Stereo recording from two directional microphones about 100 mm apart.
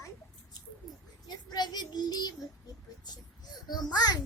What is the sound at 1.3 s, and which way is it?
Speech, 45° left (ahead or behind).